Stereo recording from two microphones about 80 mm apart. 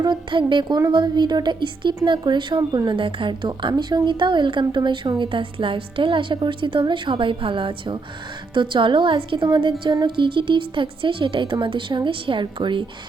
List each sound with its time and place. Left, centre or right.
0.0 s a woman's voice: right
4.7 s a woman's voice: right